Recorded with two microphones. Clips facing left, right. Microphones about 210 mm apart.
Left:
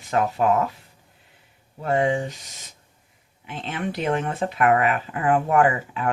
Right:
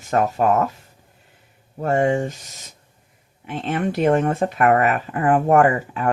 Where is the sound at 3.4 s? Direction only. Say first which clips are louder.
Right 6 dB; 45° right (ahead or behind).